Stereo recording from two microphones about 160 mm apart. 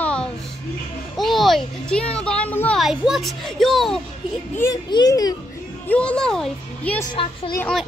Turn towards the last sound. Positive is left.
turn(degrees=5)  # may be behind; listen again after turning